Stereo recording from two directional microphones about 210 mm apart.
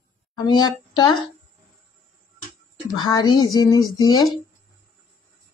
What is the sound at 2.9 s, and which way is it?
Speech, 20° left (ahead or behind).